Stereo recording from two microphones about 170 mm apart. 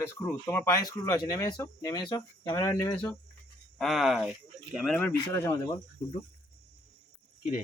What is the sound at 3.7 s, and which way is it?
Speech, centre (ahead or behind).